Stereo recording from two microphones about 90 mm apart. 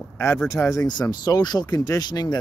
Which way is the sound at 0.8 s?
50° left (ahead or behind).